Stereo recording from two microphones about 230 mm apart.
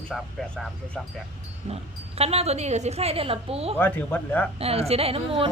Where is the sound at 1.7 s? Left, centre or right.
Right.